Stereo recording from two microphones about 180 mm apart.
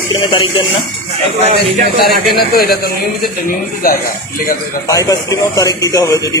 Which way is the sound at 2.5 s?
60° left (ahead or behind).